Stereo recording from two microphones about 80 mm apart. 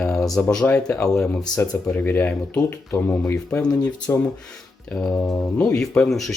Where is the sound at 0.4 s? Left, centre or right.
Centre.